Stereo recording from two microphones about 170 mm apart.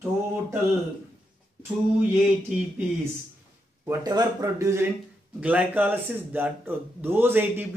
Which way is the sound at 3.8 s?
20° right (ahead or behind).